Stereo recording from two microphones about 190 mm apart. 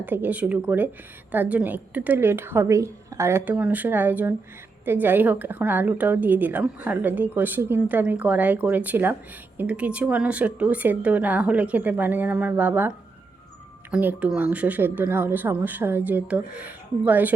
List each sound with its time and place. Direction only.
0.0 s a woman's voice: 10° right (ahead or behind)
13.9 s a woman's voice: 10° right (ahead or behind)